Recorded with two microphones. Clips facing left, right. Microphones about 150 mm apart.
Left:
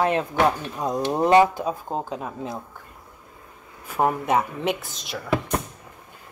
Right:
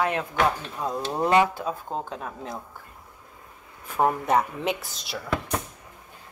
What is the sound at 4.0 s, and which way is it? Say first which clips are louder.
Speech: left 1 dB; 5° left (ahead or behind).